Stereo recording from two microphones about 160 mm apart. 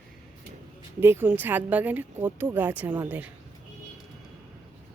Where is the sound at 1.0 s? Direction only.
15° right (ahead or behind).